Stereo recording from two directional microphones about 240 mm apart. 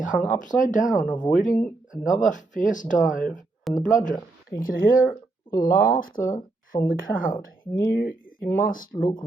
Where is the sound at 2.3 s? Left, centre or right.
Left.